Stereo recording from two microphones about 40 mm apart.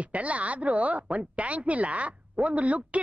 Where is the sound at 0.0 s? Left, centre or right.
Right.